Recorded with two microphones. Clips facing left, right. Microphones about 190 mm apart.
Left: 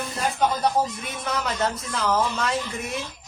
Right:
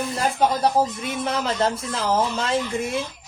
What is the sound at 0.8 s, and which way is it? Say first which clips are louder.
Speech: right 3 dB; 30° right (ahead or behind).